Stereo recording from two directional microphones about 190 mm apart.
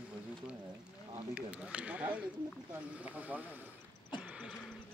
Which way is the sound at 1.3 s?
5° right (ahead or behind).